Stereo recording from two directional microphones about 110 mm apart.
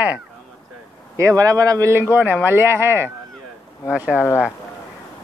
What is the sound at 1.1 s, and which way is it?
Speech, 30° right (ahead or behind).